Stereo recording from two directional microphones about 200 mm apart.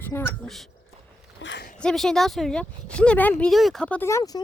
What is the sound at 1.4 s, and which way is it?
Speech, 60° left (ahead or behind).